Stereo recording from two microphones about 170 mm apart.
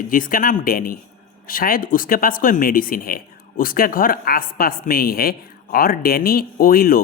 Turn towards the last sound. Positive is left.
turn(degrees=60)  # may be behind; listen again after turning